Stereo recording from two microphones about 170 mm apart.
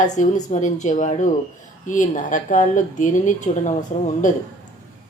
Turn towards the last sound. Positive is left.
turn(degrees=50)  # may be behind; listen again after turning